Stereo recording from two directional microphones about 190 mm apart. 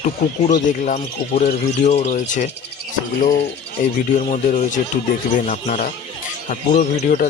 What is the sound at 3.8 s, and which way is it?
Speech, 45° left (ahead or behind).